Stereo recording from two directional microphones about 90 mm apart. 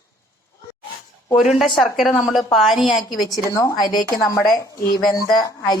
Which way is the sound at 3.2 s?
40° left (ahead or behind).